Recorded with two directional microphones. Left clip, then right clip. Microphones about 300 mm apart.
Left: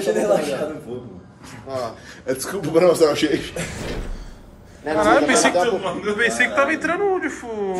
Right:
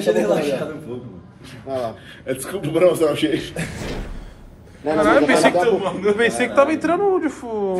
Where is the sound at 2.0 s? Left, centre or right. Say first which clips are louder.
Left 1 dB; centre.